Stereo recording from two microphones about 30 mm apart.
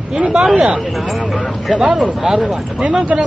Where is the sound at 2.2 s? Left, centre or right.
Centre.